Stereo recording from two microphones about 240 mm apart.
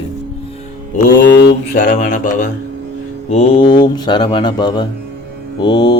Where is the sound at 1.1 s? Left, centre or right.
Left.